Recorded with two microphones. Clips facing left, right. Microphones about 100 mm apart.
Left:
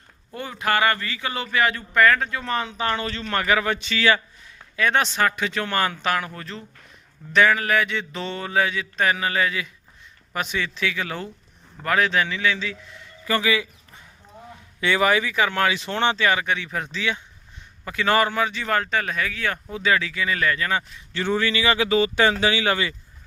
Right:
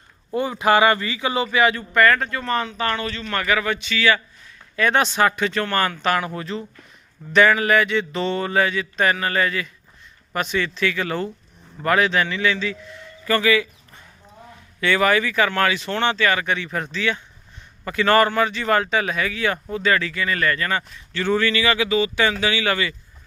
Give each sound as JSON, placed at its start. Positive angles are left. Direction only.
{"t": 0.3, "sound": "speech", "side_deg": -15}
{"t": 4.8, "sound": "speech", "side_deg": 0}
{"t": 5.5, "sound": "a man's voice", "side_deg": 10}
{"t": 16.5, "sound": "a man's voice", "side_deg": 5}
{"t": 19.7, "sound": "a man's voice", "side_deg": 10}
{"t": 21.8, "sound": "speech", "side_deg": 40}